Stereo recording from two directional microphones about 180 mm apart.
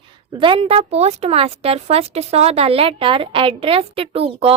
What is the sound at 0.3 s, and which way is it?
A woman's voice, 30° right (ahead or behind).